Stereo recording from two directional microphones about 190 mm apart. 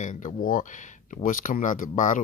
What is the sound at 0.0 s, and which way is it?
Speech, 40° left (ahead or behind).